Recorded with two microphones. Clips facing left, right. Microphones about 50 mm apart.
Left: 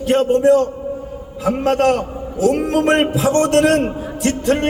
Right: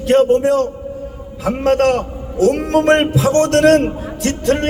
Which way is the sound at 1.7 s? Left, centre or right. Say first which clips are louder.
Right 1 dB; centre.